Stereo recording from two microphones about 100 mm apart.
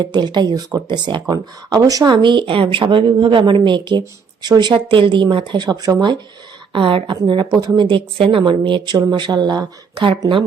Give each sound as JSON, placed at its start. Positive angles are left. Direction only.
{"t": 0.0, "sound": "a woman's voice", "side_deg": -50}
{"t": 1.3, "sound": "speech", "side_deg": -35}
{"t": 2.1, "sound": "a woman's voice", "side_deg": -55}
{"t": 6.7, "sound": "a woman's voice", "side_deg": -60}